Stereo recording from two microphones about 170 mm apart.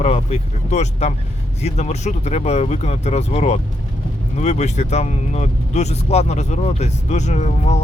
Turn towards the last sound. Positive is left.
turn(degrees=40)  # may be behind; listen again after turning